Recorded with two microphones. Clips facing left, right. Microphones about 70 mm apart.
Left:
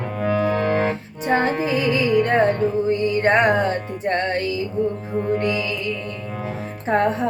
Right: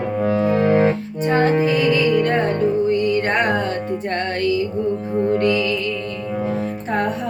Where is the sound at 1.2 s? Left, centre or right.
Left.